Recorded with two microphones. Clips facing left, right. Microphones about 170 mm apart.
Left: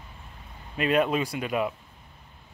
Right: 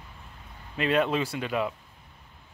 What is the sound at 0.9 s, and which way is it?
Speech, 15° left (ahead or behind).